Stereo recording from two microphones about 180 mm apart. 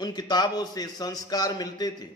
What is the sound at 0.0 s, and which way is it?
A man's voice, 25° left (ahead or behind).